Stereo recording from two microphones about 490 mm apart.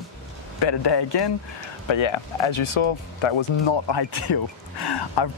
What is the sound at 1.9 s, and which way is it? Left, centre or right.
Speech, left.